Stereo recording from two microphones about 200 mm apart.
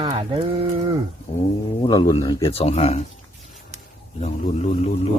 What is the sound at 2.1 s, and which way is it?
Speech, 20° left (ahead or behind).